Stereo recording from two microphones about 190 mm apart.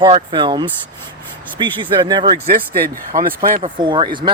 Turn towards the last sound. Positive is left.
turn(degrees=-25)  # may be behind; listen again after turning